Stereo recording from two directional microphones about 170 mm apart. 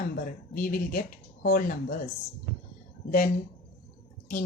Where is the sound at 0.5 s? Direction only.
55° left (ahead or behind).